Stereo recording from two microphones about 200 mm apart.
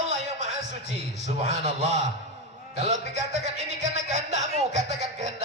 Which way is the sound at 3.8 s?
35° right (ahead or behind).